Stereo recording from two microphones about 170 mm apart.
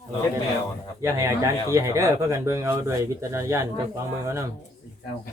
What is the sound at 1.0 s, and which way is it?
A man's voice, 20° right (ahead or behind).